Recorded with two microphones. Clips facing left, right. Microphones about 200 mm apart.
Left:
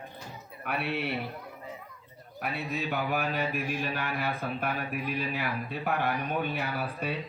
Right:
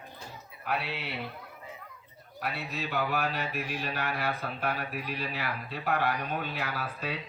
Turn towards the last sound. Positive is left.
turn(degrees=60)  # may be behind; listen again after turning